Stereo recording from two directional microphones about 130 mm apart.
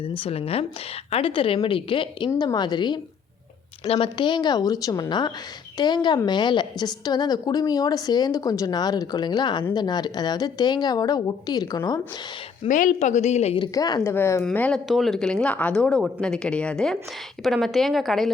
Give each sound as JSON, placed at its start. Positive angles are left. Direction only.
{"t": 0.0, "sound": "a woman's voice", "side_deg": 45}
{"t": 12.6, "sound": "speech", "side_deg": 85}
{"t": 13.6, "sound": "a woman's voice", "side_deg": 35}
{"t": 14.0, "sound": "speech", "side_deg": 20}
{"t": 14.4, "sound": "speech", "side_deg": 10}